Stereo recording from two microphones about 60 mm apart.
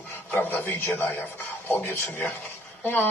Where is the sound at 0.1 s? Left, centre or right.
Left.